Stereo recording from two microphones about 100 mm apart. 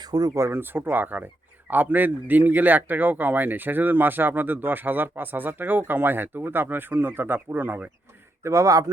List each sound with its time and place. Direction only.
0.0 s speech: 40° right (ahead or behind); by 7.9 s 20° right (ahead or behind)
8.4 s speech: 30° right (ahead or behind)